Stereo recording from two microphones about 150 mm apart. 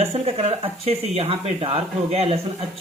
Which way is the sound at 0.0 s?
45° right (ahead or behind).